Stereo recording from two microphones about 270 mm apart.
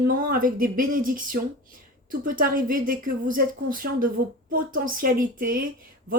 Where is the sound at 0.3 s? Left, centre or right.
Right.